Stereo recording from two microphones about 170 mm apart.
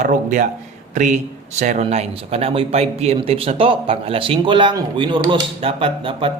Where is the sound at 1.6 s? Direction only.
45° right (ahead or behind).